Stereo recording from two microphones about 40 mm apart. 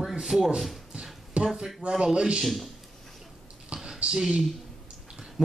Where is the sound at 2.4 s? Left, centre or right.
Centre.